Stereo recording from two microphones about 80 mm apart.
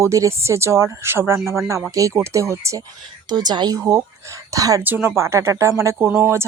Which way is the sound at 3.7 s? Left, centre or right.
Right.